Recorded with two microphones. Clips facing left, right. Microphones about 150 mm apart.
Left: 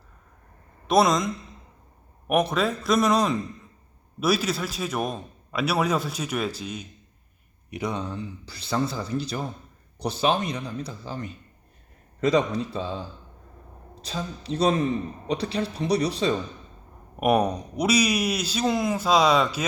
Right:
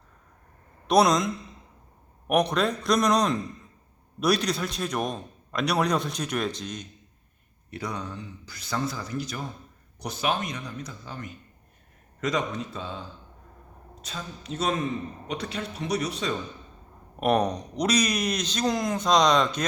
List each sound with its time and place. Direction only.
0.9 s a man's voice: centre (ahead or behind)
7.7 s speech: 20° left (ahead or behind)
14.0 s speech: 35° left (ahead or behind)
17.2 s speech: 10° left (ahead or behind)